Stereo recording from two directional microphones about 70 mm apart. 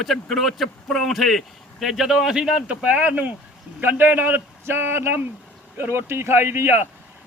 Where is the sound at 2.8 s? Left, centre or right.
Right.